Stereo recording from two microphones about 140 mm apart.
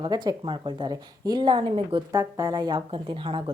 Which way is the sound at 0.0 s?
30° right (ahead or behind).